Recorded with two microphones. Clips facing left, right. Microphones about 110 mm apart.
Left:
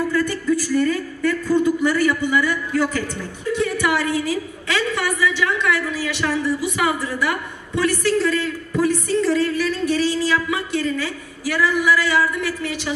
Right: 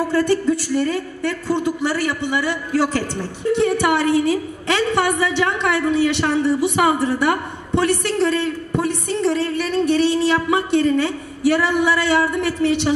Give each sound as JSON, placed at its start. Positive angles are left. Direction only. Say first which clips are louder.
{"t": 0.0, "sound": "a woman's voice", "louder": "right 4 dB", "side_deg": -30}